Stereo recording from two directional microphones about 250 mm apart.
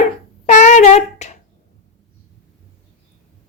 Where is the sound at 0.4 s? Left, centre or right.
Left.